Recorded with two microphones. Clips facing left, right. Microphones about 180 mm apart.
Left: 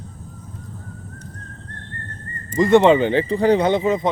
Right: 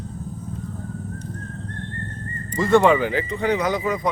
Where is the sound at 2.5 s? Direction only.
20° left (ahead or behind).